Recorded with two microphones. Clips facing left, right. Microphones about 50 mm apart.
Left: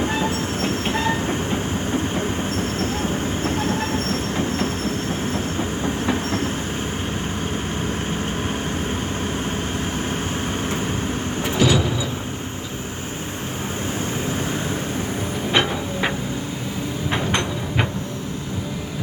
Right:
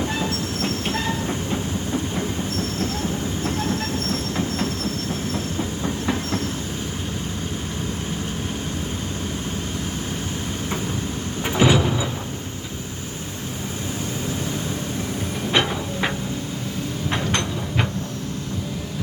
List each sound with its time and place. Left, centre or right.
0.0 s train: left
11.4 s vehicle: right
15.5 s a sound: centre
17.1 s train: centre